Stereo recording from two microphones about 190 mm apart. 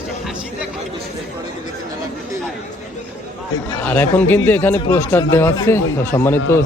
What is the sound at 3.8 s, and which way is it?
A man's voice, 10° left (ahead or behind).